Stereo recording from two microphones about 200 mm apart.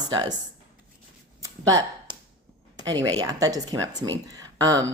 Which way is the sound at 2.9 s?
20° right (ahead or behind).